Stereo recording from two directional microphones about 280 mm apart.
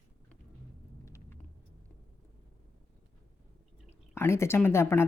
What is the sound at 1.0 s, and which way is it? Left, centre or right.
Vehicle, centre.